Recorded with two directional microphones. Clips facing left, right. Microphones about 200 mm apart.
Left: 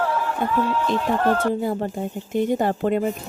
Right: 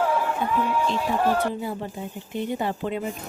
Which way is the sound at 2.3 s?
45° left (ahead or behind).